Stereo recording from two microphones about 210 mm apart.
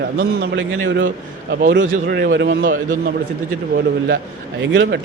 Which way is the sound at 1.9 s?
45° right (ahead or behind).